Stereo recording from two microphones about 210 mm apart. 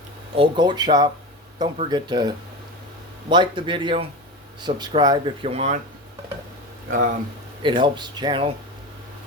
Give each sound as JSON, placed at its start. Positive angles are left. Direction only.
{"t": 0.3, "sound": "speech", "side_deg": -25}
{"t": 7.6, "sound": "speech", "side_deg": -20}